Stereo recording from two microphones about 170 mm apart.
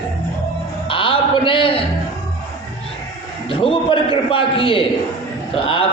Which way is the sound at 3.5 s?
30° left (ahead or behind).